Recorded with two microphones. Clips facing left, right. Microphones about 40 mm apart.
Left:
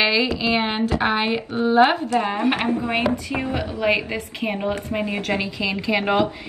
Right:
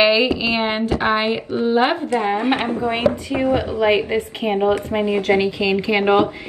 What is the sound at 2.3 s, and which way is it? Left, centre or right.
A woman's voice, right.